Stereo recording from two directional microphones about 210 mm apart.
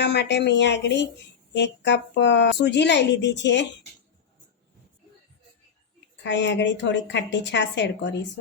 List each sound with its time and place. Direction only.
0.0 s a woman's voice: 55° left (ahead or behind)
6.2 s a woman's voice: 60° left (ahead or behind)